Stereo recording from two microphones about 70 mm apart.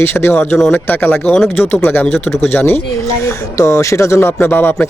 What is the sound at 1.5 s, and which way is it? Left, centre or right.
Speech, left.